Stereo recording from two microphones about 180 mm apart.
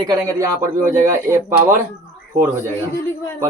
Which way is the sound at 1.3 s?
15° right (ahead or behind).